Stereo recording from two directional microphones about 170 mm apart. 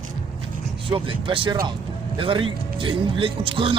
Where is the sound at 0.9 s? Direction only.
30° right (ahead or behind).